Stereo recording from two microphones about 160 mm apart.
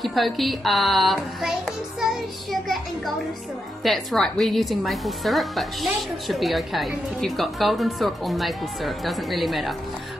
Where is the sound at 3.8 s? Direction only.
Centre (ahead or behind).